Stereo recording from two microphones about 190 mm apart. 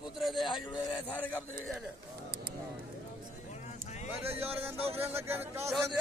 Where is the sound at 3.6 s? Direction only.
35° left (ahead or behind).